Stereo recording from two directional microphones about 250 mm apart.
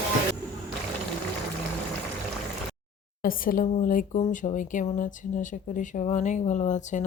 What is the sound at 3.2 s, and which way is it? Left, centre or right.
Speech, left.